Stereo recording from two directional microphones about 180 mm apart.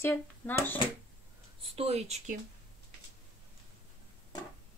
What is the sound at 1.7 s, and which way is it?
Speech, 35° right (ahead or behind).